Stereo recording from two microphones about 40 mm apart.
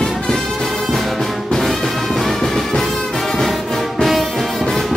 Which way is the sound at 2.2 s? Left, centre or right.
Centre.